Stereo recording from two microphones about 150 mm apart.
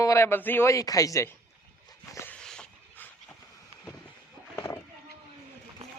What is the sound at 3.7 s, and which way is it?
Vehicle, 40° right (ahead or behind).